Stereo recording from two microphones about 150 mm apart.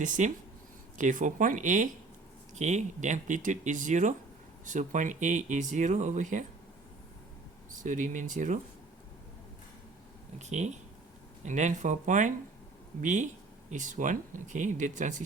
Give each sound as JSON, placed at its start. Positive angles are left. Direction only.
{"t": 0.0, "sound": "speech", "side_deg": -60}
{"t": 7.7, "sound": "speech", "side_deg": -60}
{"t": 10.3, "sound": "speech", "side_deg": -50}